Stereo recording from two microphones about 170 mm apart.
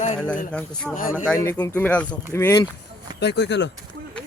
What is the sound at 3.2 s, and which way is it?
Speech, 90° left.